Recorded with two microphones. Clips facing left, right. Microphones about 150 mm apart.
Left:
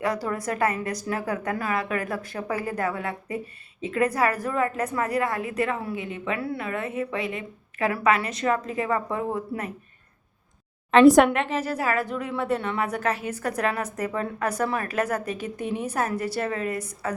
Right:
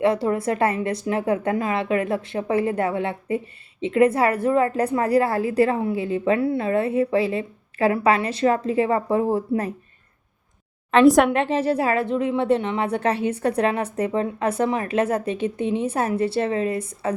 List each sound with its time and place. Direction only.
0.0 s a woman's voice: 25° right (ahead or behind)
10.9 s a woman's voice: centre (ahead or behind)
11.3 s a woman's voice: 30° right (ahead or behind)